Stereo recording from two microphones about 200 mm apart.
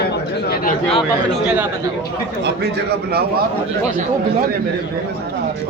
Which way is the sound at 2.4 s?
55° right (ahead or behind).